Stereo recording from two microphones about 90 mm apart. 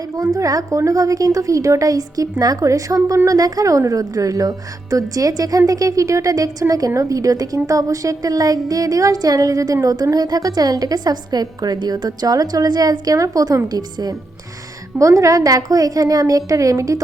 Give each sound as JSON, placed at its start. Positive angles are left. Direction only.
{"t": 0.3, "sound": "a woman's voice", "side_deg": -40}
{"t": 14.9, "sound": "a woman's voice", "side_deg": -35}